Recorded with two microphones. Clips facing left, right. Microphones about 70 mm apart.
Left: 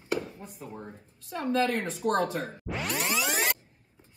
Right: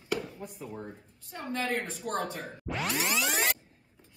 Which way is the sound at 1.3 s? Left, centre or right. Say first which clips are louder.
Left 5 dB; left.